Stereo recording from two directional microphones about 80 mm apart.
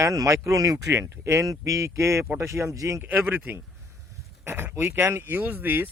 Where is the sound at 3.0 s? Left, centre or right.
Right.